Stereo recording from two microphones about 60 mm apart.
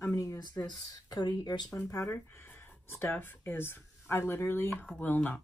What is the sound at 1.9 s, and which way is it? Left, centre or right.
Speech, left.